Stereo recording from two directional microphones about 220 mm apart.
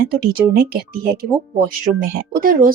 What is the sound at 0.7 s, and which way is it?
A woman's voice, 45° right (ahead or behind).